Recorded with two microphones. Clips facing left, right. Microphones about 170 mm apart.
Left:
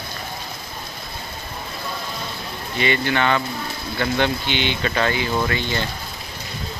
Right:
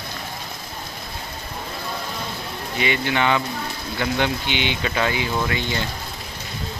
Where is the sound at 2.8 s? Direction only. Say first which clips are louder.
Left 1 dB; 10° right (ahead or behind).